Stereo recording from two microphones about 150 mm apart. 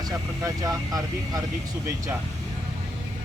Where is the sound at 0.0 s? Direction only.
25° right (ahead or behind).